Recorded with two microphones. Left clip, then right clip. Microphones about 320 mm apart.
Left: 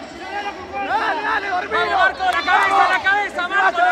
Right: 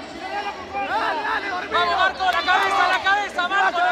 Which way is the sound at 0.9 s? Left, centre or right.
Left.